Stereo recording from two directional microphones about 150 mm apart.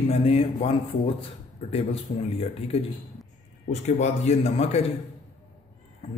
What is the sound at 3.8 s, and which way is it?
A man's voice, 50° left (ahead or behind).